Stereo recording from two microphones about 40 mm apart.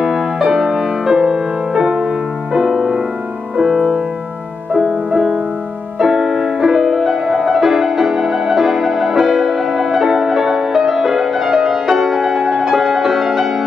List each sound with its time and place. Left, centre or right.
0.0 s music: centre
2.5 s music: centre
4.7 s music: centre